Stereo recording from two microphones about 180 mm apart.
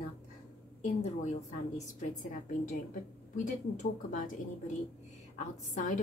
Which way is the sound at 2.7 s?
45° left (ahead or behind).